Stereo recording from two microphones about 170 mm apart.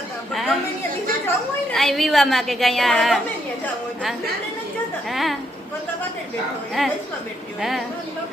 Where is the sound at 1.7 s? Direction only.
Centre (ahead or behind).